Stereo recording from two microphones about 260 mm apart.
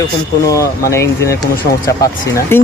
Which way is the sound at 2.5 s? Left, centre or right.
Centre.